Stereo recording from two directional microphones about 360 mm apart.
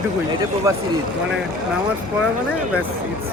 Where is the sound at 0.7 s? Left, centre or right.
Centre.